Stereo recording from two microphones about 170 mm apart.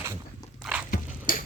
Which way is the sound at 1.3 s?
55° left (ahead or behind).